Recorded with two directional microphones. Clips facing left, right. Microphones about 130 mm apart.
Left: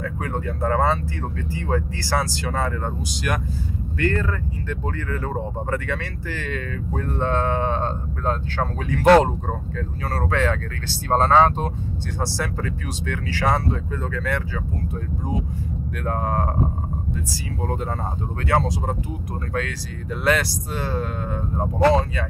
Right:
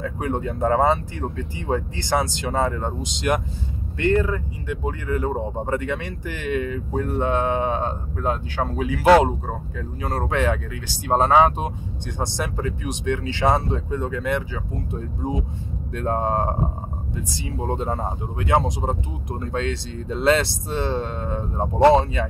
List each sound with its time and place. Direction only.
0.0 s speech: 20° right (ahead or behind)
9.8 s speech: 15° right (ahead or behind)
16.0 s speech: 25° right (ahead or behind)